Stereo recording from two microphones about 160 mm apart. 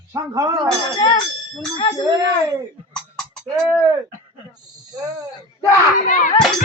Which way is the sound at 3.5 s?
15° right (ahead or behind).